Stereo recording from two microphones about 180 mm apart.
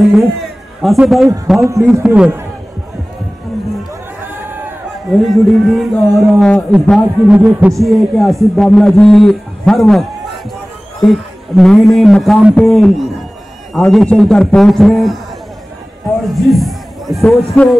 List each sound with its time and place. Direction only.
0.1 s a man's voice: centre (ahead or behind)
1.6 s a man's voice: 15° right (ahead or behind)
2.0 s a man's voice: 5° right (ahead or behind)
5.1 s a man's voice: centre (ahead or behind)
11.1 s a man's voice: centre (ahead or behind)
16.4 s a sound: centre (ahead or behind)
17.2 s a man's voice: centre (ahead or behind)